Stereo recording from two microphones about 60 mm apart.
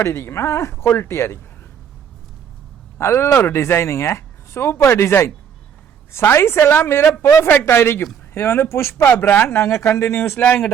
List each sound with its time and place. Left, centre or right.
0.0 s speech: left
3.0 s speech: left